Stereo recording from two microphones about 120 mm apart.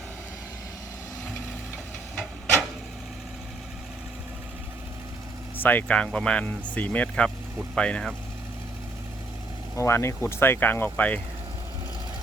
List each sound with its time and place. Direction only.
5.5 s speech: 15° left (ahead or behind)
9.7 s speech: 20° left (ahead or behind)